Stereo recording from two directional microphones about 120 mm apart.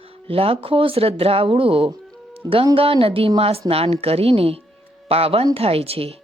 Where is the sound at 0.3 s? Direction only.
50° right (ahead or behind).